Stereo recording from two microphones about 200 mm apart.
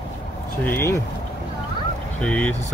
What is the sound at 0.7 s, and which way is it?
Speech, 15° left (ahead or behind).